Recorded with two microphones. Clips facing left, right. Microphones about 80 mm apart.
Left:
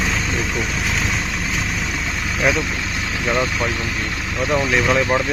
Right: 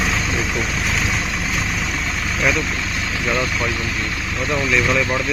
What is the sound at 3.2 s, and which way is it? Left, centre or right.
Speech, centre.